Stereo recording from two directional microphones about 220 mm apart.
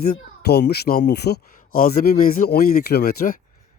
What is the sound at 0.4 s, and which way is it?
Speech, 45° left (ahead or behind).